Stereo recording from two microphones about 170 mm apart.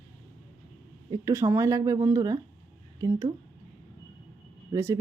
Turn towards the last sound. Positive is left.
turn(degrees=-15)  # may be behind; listen again after turning